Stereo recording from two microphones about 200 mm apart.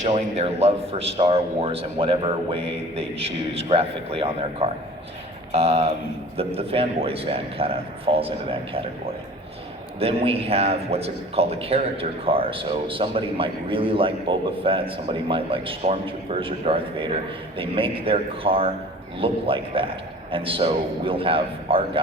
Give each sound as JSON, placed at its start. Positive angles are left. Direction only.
{"t": 0.0, "sound": "a man's voice", "side_deg": -30}
{"t": 10.0, "sound": "a man's voice", "side_deg": -30}